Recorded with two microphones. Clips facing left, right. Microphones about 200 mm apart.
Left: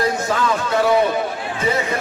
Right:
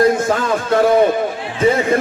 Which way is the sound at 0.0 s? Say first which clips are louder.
Right 5 dB; 50° right (ahead or behind).